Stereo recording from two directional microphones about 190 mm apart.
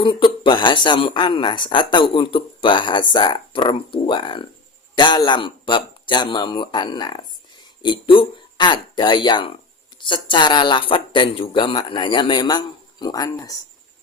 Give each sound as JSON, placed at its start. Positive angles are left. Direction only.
{"t": 0.0, "sound": "speech", "side_deg": 25}